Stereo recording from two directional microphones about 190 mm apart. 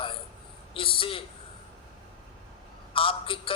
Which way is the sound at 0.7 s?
30° left (ahead or behind).